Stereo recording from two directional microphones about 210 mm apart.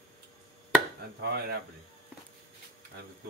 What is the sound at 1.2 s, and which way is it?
Speech, 50° right (ahead or behind).